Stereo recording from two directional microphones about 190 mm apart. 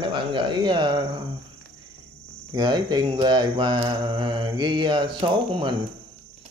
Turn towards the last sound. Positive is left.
turn(degrees=-25)  # may be behind; listen again after turning